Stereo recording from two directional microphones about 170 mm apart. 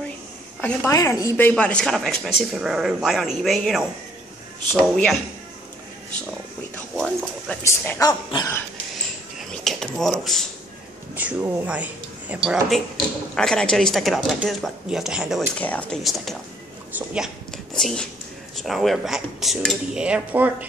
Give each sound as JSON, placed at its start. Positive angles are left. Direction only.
{"t": 0.6, "sound": "a woman's voice", "side_deg": 10}
{"t": 0.9, "sound": "speech", "side_deg": 20}
{"t": 4.9, "sound": "speech", "side_deg": 5}
{"t": 6.7, "sound": "a sound", "side_deg": 5}
{"t": 7.6, "sound": "speech", "side_deg": 15}
{"t": 8.1, "sound": "dog", "side_deg": 25}
{"t": 9.5, "sound": "a sound", "side_deg": 0}
{"t": 11.1, "sound": "speech", "side_deg": -10}